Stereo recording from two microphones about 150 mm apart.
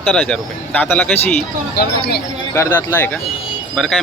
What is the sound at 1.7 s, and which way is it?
Speech, 90° left.